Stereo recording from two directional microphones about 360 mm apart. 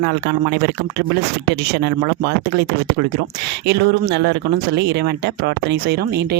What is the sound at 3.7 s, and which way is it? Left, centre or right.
Speech, right.